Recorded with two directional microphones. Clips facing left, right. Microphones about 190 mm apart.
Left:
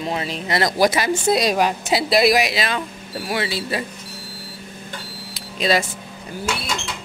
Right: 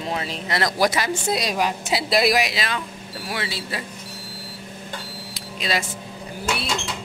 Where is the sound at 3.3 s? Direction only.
20° left (ahead or behind).